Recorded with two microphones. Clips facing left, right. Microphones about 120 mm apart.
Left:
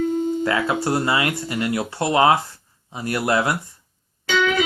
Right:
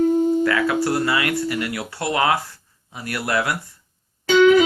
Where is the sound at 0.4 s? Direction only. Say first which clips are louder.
Right 2 dB; 25° left (ahead or behind).